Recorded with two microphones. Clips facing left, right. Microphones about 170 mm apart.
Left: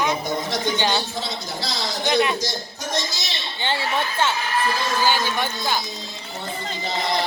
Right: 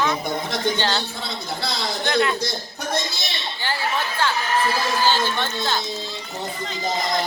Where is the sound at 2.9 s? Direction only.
60° right (ahead or behind).